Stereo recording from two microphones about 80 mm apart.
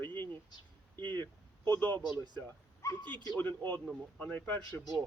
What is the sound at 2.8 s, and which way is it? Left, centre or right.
Speech, left.